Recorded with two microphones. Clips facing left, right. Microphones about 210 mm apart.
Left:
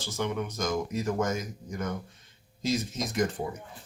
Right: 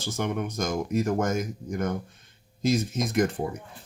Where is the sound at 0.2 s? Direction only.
50° right (ahead or behind).